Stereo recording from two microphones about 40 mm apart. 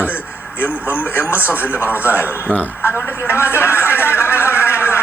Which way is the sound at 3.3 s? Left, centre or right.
Left.